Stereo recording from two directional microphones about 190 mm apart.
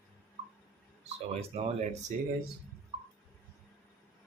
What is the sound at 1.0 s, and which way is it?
Speech, 35° right (ahead or behind).